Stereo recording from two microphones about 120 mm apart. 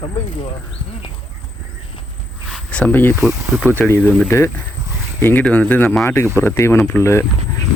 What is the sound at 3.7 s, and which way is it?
Speech, 20° left (ahead or behind).